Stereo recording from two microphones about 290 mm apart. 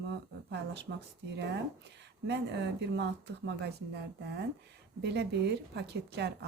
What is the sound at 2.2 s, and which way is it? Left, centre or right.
A woman's voice, right.